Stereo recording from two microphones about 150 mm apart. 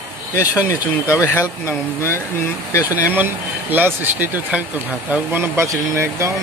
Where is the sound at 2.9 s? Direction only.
10° right (ahead or behind).